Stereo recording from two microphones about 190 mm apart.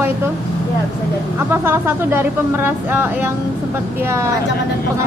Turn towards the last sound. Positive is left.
turn(degrees=-10)  # may be behind; listen again after turning